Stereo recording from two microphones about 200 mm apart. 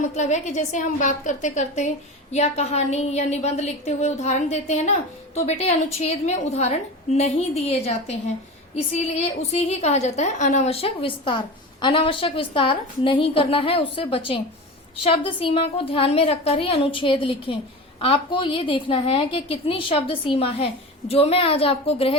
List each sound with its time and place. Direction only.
0.2 s a woman's voice: 35° left (ahead or behind)